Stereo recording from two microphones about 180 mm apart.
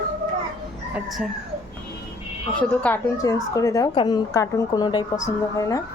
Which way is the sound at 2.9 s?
10° left (ahead or behind).